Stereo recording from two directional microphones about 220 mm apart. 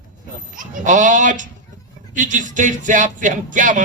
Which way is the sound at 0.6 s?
35° right (ahead or behind).